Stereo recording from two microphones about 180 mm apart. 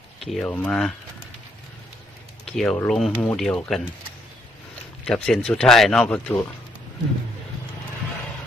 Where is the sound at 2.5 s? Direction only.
5° left (ahead or behind).